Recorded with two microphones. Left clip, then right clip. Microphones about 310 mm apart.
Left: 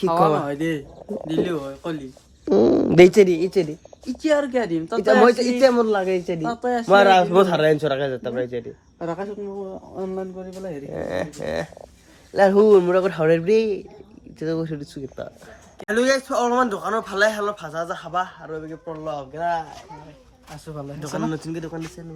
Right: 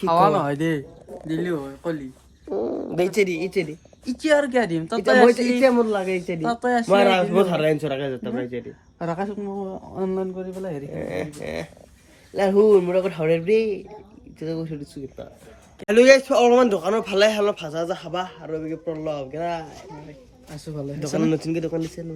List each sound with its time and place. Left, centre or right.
0.1 s speech: centre
1.5 s speech: centre
2.5 s speech: left; by 3.8 s centre
4.0 s speech: right
5.2 s a man's voice: centre
6.4 s speech: right
6.8 s a man's voice: centre
9.0 s speech: right
11.0 s a man's voice: centre
17.9 s a man's voice: centre
19.3 s speech: centre
20.9 s speech: centre
21.5 s a man's voice: centre